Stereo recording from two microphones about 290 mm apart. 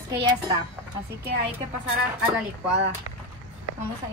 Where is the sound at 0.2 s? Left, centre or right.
Centre.